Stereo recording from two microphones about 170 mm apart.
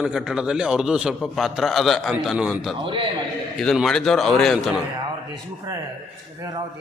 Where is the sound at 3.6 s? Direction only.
Centre (ahead or behind).